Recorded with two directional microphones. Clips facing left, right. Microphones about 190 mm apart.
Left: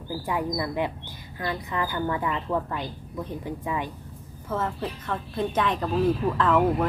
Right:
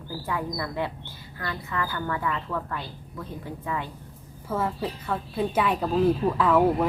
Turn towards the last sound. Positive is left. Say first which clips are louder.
# right 1 dB
turn(degrees=-10)  # may be behind; listen again after turning